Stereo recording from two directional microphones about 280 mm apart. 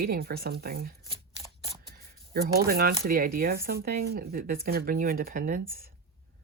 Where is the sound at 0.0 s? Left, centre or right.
Right.